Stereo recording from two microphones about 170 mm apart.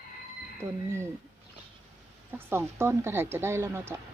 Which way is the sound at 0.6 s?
15° right (ahead or behind).